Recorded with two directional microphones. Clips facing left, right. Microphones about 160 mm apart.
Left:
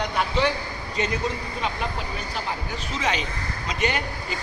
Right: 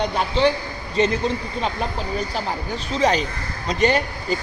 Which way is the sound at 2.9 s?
35° right (ahead or behind).